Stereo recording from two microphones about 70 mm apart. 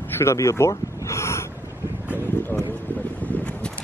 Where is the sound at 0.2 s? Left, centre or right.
Left.